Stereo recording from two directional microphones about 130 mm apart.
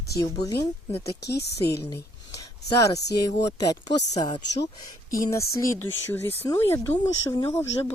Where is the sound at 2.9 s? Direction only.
25° left (ahead or behind).